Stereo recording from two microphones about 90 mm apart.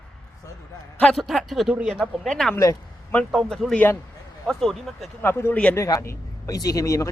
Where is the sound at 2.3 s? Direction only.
5° left (ahead or behind).